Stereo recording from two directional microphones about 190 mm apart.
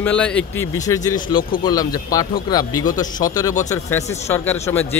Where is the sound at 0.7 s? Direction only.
20° left (ahead or behind).